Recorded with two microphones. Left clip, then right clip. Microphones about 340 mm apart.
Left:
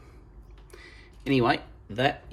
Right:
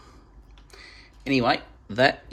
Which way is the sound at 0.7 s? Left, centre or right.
Centre.